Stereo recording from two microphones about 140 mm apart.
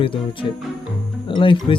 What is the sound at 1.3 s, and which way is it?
Speech, 35° left (ahead or behind).